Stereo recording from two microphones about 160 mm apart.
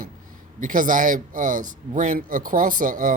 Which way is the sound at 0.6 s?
55° right (ahead or behind).